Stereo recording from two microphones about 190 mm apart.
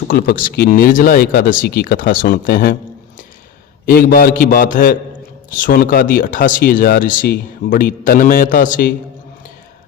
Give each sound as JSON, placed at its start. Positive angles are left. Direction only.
{"t": 0.1, "sound": "speech", "side_deg": 55}
{"t": 3.8, "sound": "speech", "side_deg": 50}